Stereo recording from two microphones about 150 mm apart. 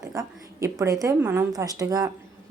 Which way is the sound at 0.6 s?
25° right (ahead or behind).